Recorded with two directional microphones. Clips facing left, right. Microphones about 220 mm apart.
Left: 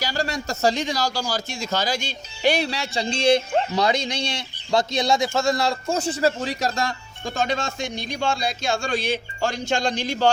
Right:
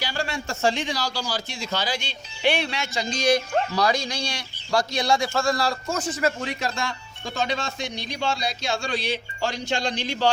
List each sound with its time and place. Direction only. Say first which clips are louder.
0.0 s speech: left 3 dB; 40° left (ahead or behind)